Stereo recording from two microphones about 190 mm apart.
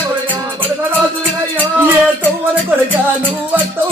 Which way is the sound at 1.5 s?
10° right (ahead or behind).